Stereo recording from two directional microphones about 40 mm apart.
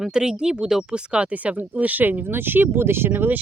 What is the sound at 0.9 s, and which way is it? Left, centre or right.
Speech, right.